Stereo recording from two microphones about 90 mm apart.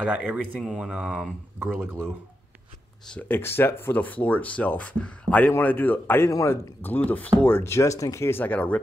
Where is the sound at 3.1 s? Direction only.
20° left (ahead or behind).